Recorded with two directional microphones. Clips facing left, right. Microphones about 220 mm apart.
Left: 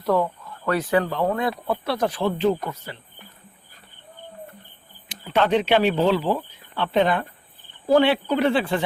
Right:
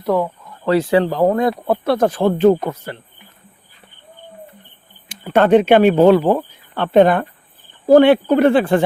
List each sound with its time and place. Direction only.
0.0 s speech: 15° right (ahead or behind)
0.6 s speech: 25° right (ahead or behind)
1.2 s speech: 40° right (ahead or behind)
5.0 s speech: 50° right (ahead or behind)